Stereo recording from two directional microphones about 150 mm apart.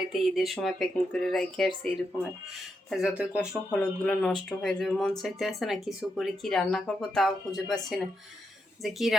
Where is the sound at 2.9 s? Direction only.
5° right (ahead or behind).